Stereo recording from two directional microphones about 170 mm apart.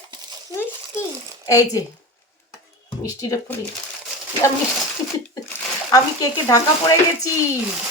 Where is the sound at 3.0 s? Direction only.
20° left (ahead or behind).